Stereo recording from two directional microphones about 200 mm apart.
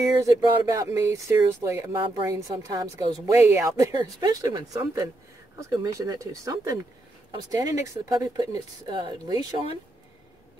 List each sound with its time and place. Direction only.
0.0 s a woman's voice: 15° right (ahead or behind)